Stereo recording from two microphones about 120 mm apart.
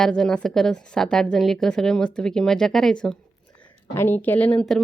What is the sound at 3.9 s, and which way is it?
Speech, 20° left (ahead or behind).